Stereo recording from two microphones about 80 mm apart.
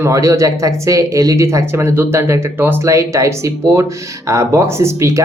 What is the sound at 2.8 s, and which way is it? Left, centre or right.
Speech, right.